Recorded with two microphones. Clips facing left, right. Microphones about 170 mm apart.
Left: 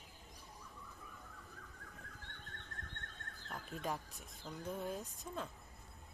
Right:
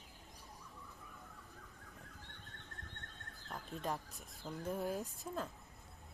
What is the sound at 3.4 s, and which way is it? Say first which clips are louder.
Neigh: right 1 dB; 20° right (ahead or behind).